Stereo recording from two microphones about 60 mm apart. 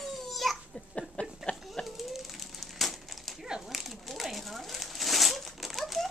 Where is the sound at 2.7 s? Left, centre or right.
Centre.